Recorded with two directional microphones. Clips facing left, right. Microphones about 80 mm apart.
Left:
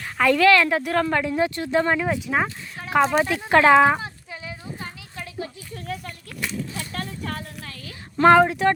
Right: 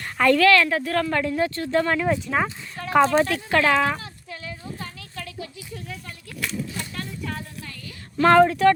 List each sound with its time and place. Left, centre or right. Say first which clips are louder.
0.0 s a sound: right 1 dB; centre
0.3 s speech: left 3 dB; centre
5.9 s speech: left 11 dB; left
8.2 s speech: even; centre